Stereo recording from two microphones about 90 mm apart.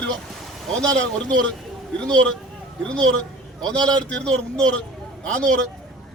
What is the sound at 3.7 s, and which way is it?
Speech, 50° right (ahead or behind).